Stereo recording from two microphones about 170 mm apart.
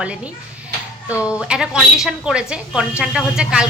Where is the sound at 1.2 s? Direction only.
5° right (ahead or behind).